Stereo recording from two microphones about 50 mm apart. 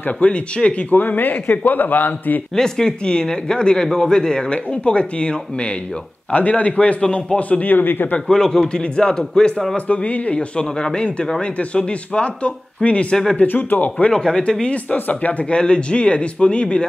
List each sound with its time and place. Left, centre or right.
0.2 s speech: left
0.9 s a man's voice: left
2.5 s speech: centre
6.3 s speech: left
8.3 s speech: centre
9.8 s speech: left
13.4 s a man's voice: left
14.1 s speech: centre